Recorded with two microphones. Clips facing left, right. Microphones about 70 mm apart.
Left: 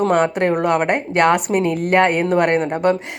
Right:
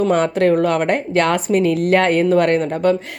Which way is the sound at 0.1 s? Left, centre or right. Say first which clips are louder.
Right 1 dB; centre.